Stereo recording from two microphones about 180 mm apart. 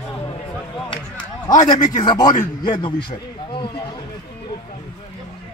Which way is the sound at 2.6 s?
25° left (ahead or behind).